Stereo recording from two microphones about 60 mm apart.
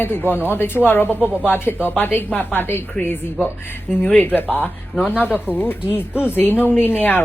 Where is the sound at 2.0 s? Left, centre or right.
Left.